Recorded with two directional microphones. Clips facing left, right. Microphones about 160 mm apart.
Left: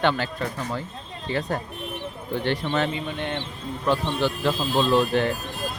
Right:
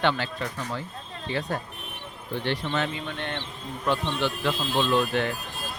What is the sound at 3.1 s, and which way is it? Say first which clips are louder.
Speech: left 4 dB; 15° left (ahead or behind).